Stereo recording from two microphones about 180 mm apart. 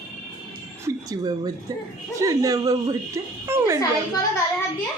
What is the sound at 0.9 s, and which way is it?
A man's voice, 20° right (ahead or behind).